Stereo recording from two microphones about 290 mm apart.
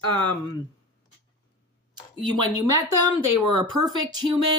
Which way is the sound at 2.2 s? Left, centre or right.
Centre.